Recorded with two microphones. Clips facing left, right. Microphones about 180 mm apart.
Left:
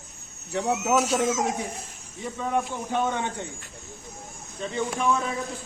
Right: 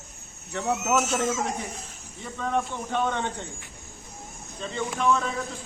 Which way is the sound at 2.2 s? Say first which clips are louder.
Left 1 dB; 10° left (ahead or behind).